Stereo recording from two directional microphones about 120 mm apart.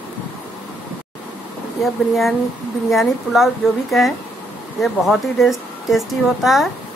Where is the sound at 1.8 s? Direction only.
Centre (ahead or behind).